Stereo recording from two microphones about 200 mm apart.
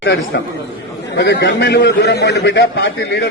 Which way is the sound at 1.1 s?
55° left (ahead or behind).